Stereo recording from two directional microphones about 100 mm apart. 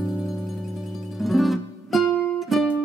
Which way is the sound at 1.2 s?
Centre (ahead or behind).